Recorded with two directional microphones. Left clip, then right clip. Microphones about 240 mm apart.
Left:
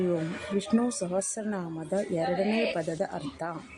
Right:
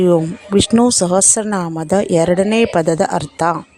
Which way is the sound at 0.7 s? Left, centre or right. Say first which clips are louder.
Right 14 dB; right.